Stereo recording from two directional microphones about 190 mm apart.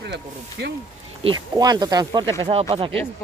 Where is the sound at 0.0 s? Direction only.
60° right (ahead or behind).